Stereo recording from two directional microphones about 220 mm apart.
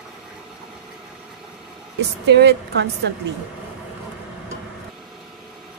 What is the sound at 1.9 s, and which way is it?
Speech, 50° right (ahead or behind).